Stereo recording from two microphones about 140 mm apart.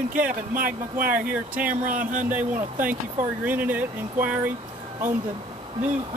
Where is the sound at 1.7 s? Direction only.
65° right (ahead or behind).